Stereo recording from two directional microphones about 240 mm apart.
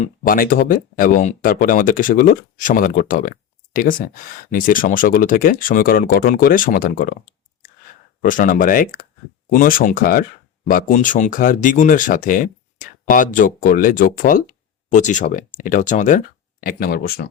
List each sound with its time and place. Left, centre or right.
0.0 s speech: left